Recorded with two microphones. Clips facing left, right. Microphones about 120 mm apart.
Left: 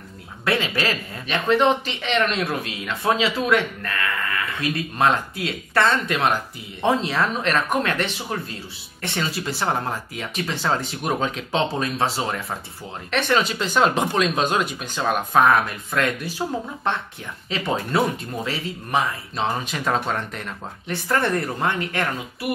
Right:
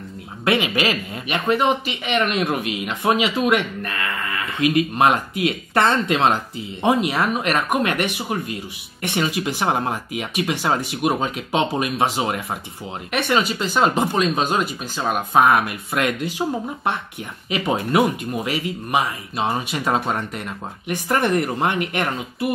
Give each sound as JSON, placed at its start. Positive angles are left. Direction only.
{"t": 0.5, "sound": "speech", "side_deg": -15}